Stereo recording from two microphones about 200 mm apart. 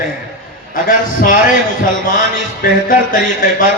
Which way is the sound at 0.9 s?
45° left (ahead or behind).